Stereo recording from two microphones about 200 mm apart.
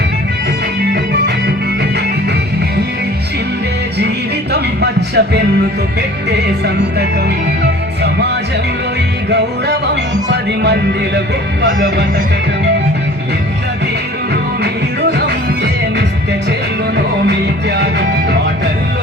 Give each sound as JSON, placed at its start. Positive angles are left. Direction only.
{"t": 4.5, "sound": "music", "side_deg": -55}
{"t": 9.3, "sound": "music", "side_deg": -60}